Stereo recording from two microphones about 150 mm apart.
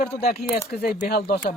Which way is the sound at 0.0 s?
90° left.